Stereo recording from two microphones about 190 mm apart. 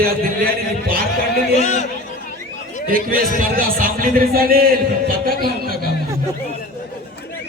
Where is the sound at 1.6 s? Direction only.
35° left (ahead or behind).